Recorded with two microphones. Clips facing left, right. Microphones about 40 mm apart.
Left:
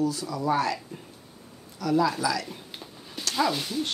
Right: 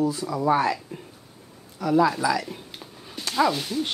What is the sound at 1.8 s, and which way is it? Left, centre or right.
Speech, right.